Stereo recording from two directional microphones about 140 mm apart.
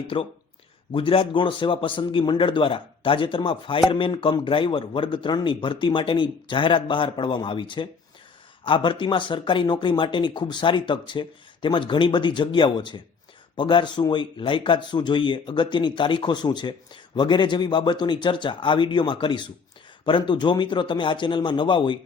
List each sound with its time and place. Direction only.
0.1 s speech: 40° left (ahead or behind)